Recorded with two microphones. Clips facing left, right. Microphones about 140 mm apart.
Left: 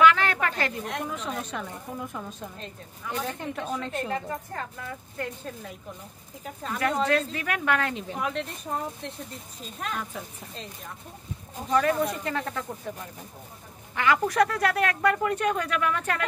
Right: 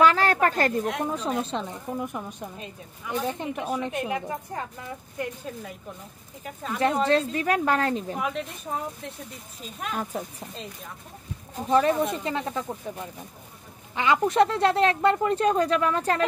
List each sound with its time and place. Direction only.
0.0 s a sound: 35° right (ahead or behind)
1.0 s a woman's voice: 35° right (ahead or behind); by 5.5 s 15° right (ahead or behind)
6.4 s speech: centre (ahead or behind)
7.1 s a woman's voice: 30° right (ahead or behind)
8.2 s speech: 5° right (ahead or behind)
11.7 s speech: 25° right (ahead or behind)